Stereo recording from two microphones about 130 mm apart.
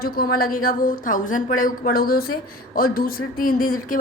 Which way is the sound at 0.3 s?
90° left.